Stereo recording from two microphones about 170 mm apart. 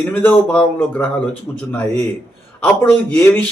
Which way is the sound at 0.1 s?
10° left (ahead or behind).